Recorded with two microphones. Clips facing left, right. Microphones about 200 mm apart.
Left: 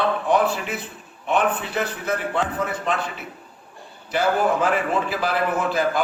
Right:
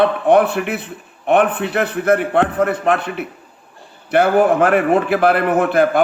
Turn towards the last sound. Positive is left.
turn(degrees=-60)  # may be behind; listen again after turning